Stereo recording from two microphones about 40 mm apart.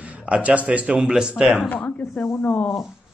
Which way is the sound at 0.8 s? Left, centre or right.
Centre.